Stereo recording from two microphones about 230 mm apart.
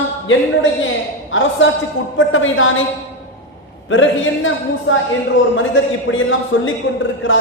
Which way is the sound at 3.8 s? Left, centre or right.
Left.